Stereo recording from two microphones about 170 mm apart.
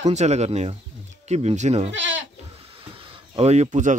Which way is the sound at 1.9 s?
90° right.